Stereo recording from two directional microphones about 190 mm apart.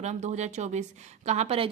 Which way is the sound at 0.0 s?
35° right (ahead or behind).